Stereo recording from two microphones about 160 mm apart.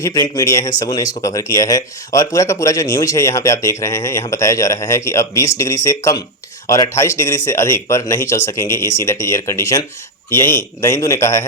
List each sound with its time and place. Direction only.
0.0 s speech: 20° left (ahead or behind)